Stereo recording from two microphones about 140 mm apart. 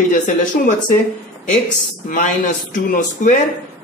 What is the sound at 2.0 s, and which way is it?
A man's voice, 70° left (ahead or behind).